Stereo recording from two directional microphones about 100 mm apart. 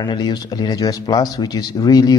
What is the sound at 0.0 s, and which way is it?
Speech, 45° left (ahead or behind).